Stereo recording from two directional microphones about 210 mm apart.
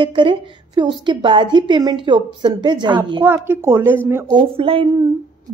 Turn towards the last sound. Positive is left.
turn(degrees=-25)  # may be behind; listen again after turning